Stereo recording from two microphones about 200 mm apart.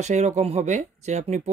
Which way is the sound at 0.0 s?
35° right (ahead or behind).